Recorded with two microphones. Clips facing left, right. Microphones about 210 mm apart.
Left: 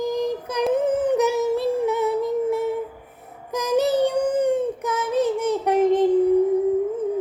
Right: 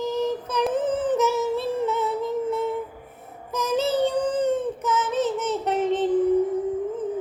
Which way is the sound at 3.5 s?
15° left (ahead or behind).